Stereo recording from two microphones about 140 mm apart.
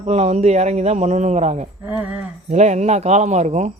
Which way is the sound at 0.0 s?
50° right (ahead or behind).